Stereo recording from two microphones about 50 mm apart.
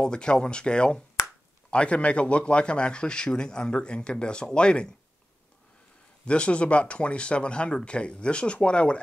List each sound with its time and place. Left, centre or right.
0.0 s a man's voice: centre
6.2 s a man's voice: left